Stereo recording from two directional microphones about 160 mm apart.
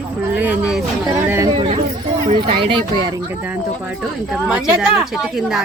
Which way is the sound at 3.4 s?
10° right (ahead or behind).